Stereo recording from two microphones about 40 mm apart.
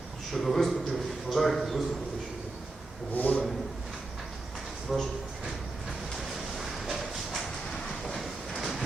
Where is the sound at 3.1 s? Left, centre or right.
Left.